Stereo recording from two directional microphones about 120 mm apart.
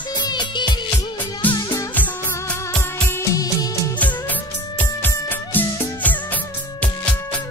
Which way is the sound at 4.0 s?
15° left (ahead or behind).